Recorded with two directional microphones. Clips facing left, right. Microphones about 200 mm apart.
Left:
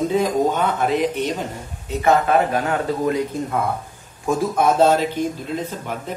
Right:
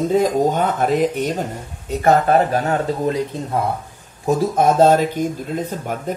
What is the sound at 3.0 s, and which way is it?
Speech, 30° right (ahead or behind).